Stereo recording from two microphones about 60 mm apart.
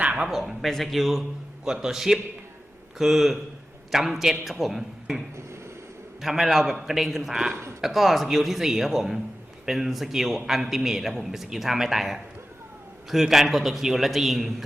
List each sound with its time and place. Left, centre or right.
0.0 s a sound: right
0.3 s a man's voice: centre
6.2 s a man's voice: centre
7.5 s speech: right
7.8 s a man's voice: centre